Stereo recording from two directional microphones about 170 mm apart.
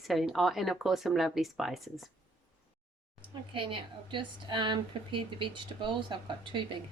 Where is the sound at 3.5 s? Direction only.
30° right (ahead or behind).